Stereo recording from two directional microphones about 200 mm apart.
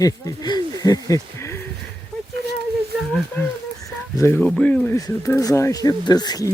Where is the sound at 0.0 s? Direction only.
20° left (ahead or behind).